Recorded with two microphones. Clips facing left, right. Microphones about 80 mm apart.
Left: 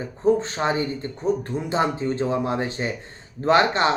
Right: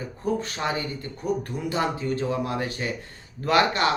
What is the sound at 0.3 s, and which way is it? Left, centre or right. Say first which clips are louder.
Speech: left 6 dB; left.